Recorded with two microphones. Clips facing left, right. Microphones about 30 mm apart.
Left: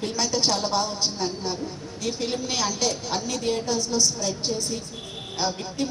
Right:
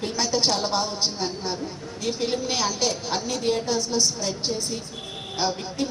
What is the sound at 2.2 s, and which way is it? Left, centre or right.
A woman's voice, centre.